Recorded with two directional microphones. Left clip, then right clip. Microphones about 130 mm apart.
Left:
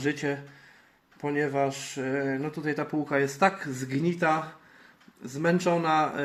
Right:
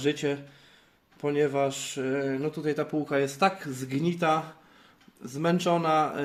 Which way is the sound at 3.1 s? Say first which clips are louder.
Left 2 dB; 25° right (ahead or behind).